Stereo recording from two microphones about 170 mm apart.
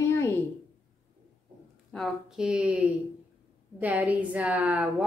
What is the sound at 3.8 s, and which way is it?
A woman's voice, 10° right (ahead or behind).